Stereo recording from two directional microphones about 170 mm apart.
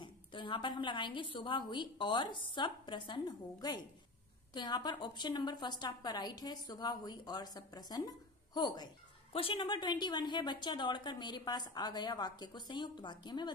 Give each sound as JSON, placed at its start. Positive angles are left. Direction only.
{"t": 0.0, "sound": "a woman's voice", "side_deg": 30}